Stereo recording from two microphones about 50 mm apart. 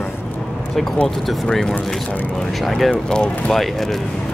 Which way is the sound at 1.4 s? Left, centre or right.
Centre.